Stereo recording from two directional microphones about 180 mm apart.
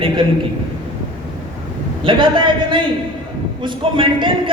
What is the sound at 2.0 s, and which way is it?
A man's voice, 30° right (ahead or behind).